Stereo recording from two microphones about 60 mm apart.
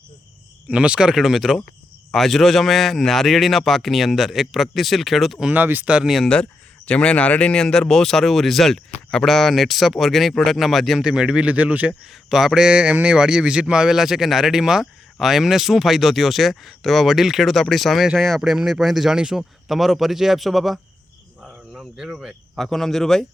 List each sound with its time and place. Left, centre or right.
0.7 s speech: centre
5.5 s speech: right
5.8 s speech: centre
6.2 s speech: centre
11.0 s speech: centre
12.3 s speech: centre
12.6 s speech: centre
21.9 s speech: centre
22.5 s speech: centre